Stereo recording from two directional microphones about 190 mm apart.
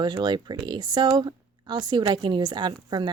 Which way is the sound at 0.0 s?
25° right (ahead or behind).